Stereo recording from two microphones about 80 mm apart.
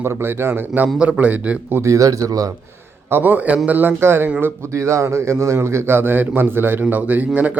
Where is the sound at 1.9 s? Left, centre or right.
Right.